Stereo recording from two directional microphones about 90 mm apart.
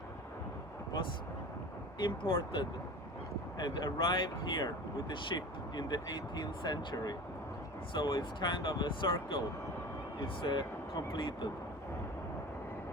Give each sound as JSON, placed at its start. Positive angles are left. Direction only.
{"t": 2.0, "sound": "speech", "side_deg": 70}
{"t": 5.3, "sound": "speech", "side_deg": 45}
{"t": 7.9, "sound": "speech", "side_deg": 60}